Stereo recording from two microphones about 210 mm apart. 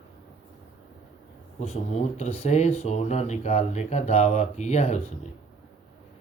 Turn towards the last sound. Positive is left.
turn(degrees=30)  # may be behind; listen again after turning